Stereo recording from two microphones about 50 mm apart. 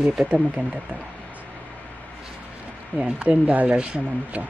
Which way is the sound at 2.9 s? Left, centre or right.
Right.